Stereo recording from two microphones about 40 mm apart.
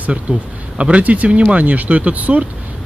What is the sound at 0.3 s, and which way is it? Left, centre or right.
Speech, right.